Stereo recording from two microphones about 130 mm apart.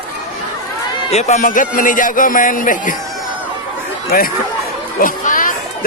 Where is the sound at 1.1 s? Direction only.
65° left (ahead or behind); by 2.9 s 90° left.